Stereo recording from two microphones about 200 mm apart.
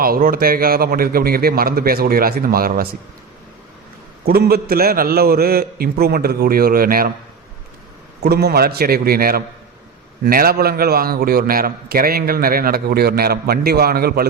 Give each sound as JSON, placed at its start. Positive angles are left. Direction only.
{"t": 0.0, "sound": "a man's voice", "side_deg": -45}
{"t": 4.3, "sound": "a man's voice", "side_deg": -50}
{"t": 8.2, "sound": "a man's voice", "side_deg": -55}